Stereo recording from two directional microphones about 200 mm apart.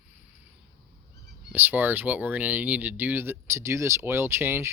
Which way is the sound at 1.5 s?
10° right (ahead or behind).